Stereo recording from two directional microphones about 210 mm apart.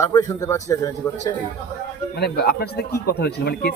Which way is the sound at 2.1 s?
50° left (ahead or behind).